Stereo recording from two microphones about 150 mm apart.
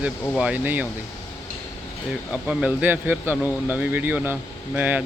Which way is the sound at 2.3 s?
10° right (ahead or behind).